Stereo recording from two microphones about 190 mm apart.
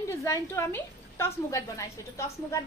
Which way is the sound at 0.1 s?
15° left (ahead or behind).